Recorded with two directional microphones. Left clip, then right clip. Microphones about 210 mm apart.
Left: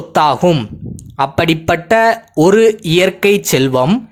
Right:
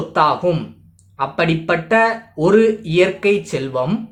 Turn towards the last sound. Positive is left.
turn(degrees=45)  # may be behind; listen again after turning